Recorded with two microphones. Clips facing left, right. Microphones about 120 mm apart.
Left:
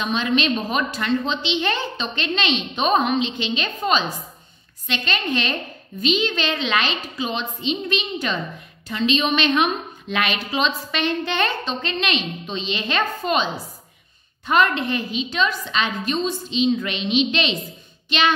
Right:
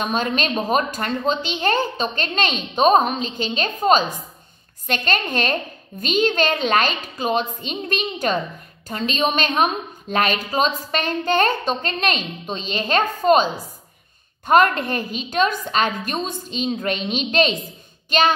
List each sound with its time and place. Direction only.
0.0 s a woman's voice: 45° right (ahead or behind)